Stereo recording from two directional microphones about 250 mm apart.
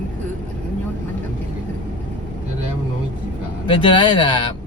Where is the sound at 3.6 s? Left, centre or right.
Centre.